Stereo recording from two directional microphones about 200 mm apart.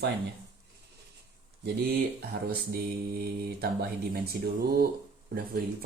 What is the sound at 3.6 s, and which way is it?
Speech, 50° right (ahead or behind).